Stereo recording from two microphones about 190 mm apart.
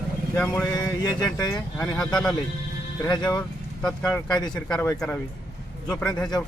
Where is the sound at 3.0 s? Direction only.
20° left (ahead or behind).